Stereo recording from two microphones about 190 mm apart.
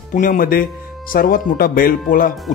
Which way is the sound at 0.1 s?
45° left (ahead or behind).